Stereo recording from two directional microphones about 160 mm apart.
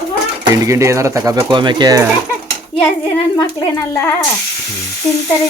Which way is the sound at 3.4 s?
20° left (ahead or behind).